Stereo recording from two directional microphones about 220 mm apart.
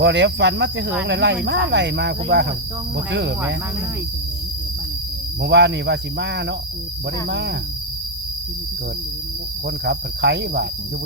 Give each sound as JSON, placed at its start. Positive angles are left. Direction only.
{"t": 0.0, "sound": "speech", "side_deg": -50}
{"t": 5.4, "sound": "speech", "side_deg": -50}
{"t": 9.6, "sound": "speech", "side_deg": -50}